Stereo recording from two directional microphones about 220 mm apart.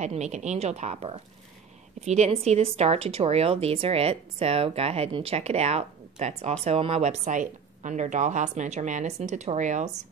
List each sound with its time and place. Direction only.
0.0 s a woman's voice: 30° right (ahead or behind)